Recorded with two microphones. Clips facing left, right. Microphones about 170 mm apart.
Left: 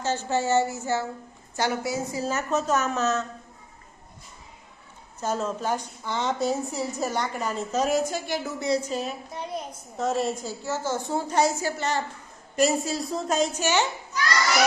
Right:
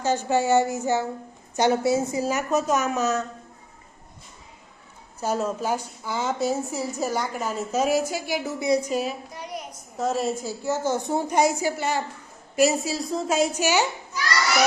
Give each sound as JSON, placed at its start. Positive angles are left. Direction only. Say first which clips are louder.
{"t": 0.0, "sound": "a woman's voice", "louder": "right 3 dB", "side_deg": -15}
{"t": 2.2, "sound": "a woman's voice", "louder": "right 2 dB", "side_deg": -10}
{"t": 5.2, "sound": "a woman's voice", "louder": "right 2 dB", "side_deg": -10}
{"t": 9.3, "sound": "a woman's voice", "louder": "left 2 dB", "side_deg": 25}
{"t": 10.0, "sound": "a woman's voice", "louder": "right 1 dB", "side_deg": 0}
{"t": 10.6, "sound": "a woman's voice", "louder": "right 5 dB", "side_deg": -15}